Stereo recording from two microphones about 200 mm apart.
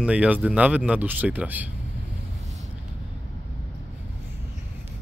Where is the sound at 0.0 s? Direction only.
5° right (ahead or behind).